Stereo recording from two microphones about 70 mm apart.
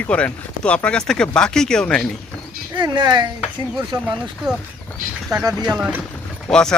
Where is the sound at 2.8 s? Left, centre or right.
Right.